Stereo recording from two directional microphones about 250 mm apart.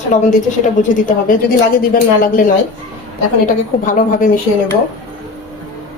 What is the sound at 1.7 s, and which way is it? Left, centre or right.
Speech, left.